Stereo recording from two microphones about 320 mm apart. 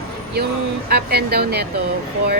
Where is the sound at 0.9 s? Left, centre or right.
Right.